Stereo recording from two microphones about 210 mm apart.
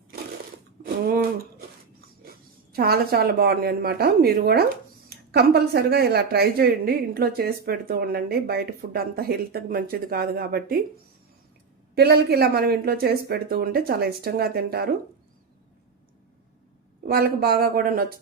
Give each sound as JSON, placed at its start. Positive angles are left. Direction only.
{"t": 2.7, "sound": "speech", "side_deg": -50}
{"t": 11.9, "sound": "speech", "side_deg": -50}
{"t": 17.1, "sound": "speech", "side_deg": -45}